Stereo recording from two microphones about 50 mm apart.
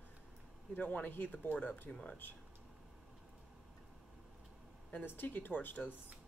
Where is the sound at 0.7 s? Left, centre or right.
Left.